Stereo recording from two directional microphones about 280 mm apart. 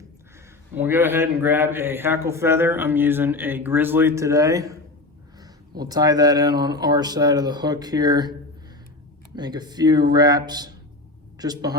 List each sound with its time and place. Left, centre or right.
0.8 s speech: centre